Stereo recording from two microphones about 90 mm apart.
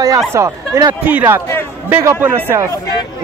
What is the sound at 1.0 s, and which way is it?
A man's voice, 25° right (ahead or behind).